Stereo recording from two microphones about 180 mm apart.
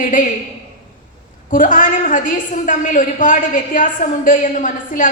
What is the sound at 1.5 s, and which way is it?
A woman's voice, 45° left (ahead or behind).